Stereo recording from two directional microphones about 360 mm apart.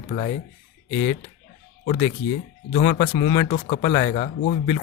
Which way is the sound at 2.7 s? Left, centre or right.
Left.